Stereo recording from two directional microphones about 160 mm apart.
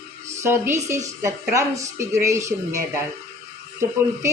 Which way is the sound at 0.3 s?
15° right (ahead or behind).